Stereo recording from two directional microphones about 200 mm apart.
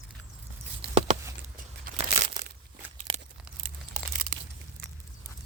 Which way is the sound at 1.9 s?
45° right (ahead or behind).